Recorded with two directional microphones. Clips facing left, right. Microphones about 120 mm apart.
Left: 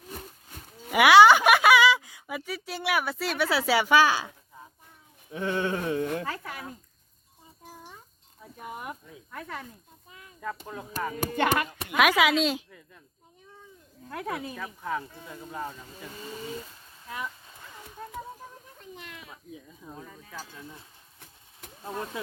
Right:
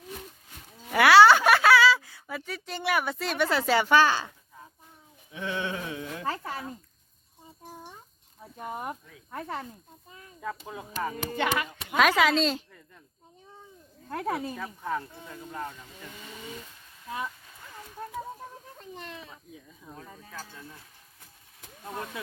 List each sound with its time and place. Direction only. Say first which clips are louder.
0.9 s speech: left 1 dB; 15° left (ahead or behind)
5.3 s speech: left 4 dB; 45° left (ahead or behind)
6.2 s a child's voice: right 3 dB; 30° right (ahead or behind)
8.5 s a child's voice: right 3 dB; 40° right (ahead or behind)
10.4 s speech: even; 5° right (ahead or behind)
11.3 s speech: left 3 dB; 50° left (ahead or behind)
11.9 s a woman's voice: even; 10° left (ahead or behind)
14.1 s a child's voice: right 3 dB; 35° right (ahead or behind)
14.5 s a woman's voice: even; centre (ahead or behind)
16.0 s speech: left 5 dB; 35° left (ahead or behind)
18.8 s speech: right 3 dB; 35° right (ahead or behind)
19.3 s a woman's voice: left 3 dB; 15° left (ahead or behind)
21.8 s speech: left 2 dB; 30° left (ahead or behind)